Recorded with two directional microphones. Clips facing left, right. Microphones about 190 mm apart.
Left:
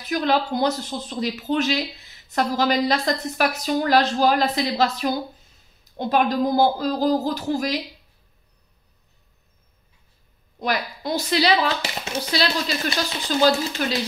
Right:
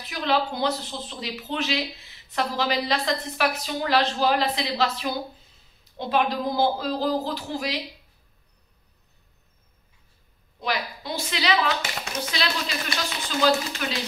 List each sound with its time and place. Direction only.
0.0 s speech: 45° left (ahead or behind)
10.6 s speech: 45° left (ahead or behind)
13.8 s speech: 35° left (ahead or behind)